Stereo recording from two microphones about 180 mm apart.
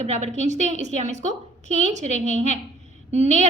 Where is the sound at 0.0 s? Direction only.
40° right (ahead or behind).